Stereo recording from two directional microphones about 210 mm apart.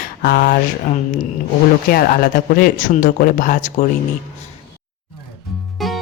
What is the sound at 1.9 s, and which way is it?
Speech, 45° left (ahead or behind).